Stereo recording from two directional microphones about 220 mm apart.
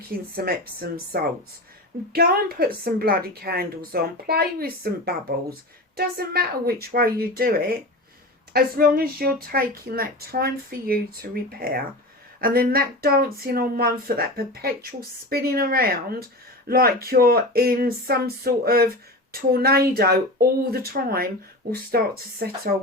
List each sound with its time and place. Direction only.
0.1 s speech: 45° right (ahead or behind)